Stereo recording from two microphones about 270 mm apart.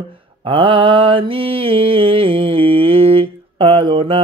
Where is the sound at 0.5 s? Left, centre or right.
Centre.